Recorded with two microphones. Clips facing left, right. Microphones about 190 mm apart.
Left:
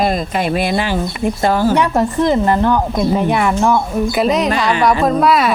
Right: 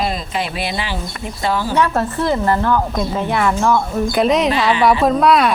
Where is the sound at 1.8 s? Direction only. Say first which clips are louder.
Left 3 dB; 15° left (ahead or behind).